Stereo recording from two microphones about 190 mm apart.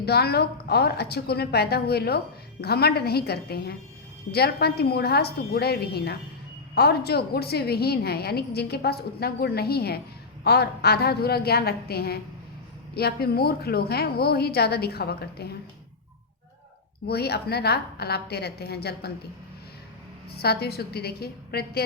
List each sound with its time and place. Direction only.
0.0 s a woman's voice: 55° left (ahead or behind)
17.1 s a woman's voice: 60° left (ahead or behind)
20.3 s a woman's voice: 55° left (ahead or behind)